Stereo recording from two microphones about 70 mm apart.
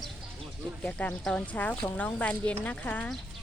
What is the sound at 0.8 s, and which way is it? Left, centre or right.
Speech, centre.